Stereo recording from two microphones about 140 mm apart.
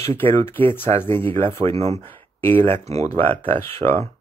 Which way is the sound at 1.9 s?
15° left (ahead or behind).